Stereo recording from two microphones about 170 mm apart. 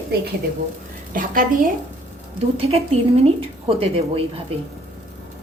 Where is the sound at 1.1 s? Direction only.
55° right (ahead or behind).